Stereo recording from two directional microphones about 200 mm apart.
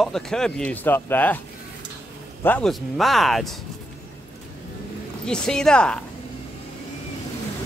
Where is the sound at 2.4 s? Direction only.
5° left (ahead or behind).